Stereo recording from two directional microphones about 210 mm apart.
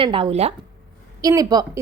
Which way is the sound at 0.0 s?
25° right (ahead or behind).